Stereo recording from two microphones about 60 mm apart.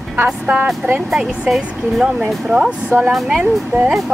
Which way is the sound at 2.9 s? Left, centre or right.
Right.